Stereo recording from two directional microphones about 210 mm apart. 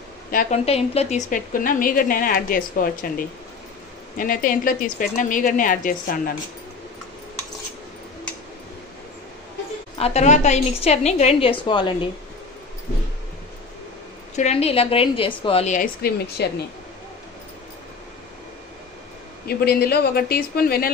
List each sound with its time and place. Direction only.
0.3 s a woman's voice: 40° left (ahead or behind)
0.7 s a woman's voice: 30° left (ahead or behind)
9.9 s a woman's voice: 30° left (ahead or behind)
14.3 s a woman's voice: 30° left (ahead or behind); by 16.6 s 50° left (ahead or behind)
19.4 s a man's voice: 50° left (ahead or behind)